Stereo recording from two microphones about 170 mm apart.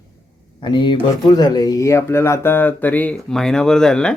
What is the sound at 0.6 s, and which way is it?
Speech, 30° left (ahead or behind).